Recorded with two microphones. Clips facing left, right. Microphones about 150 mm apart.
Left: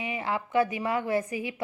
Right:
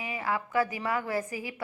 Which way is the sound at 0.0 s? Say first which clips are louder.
Left 1 dB; 25° left (ahead or behind).